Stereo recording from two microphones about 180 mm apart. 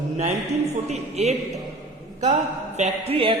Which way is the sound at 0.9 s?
35° right (ahead or behind).